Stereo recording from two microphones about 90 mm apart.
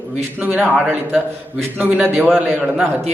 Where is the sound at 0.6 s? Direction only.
10° right (ahead or behind).